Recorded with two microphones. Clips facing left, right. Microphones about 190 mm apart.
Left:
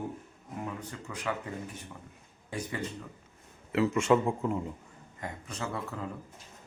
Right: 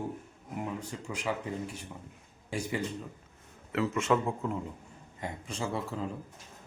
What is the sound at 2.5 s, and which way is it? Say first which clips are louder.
Speech: right 3 dB; 10° right (ahead or behind).